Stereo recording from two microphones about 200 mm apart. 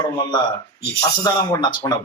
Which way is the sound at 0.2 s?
20° left (ahead or behind).